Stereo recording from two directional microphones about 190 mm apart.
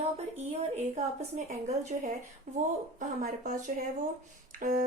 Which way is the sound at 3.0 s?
40° right (ahead or behind).